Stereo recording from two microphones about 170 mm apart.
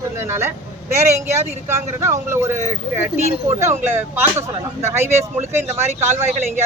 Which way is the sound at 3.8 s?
15° right (ahead or behind).